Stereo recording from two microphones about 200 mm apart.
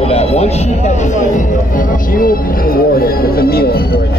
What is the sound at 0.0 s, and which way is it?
Music, 30° left (ahead or behind).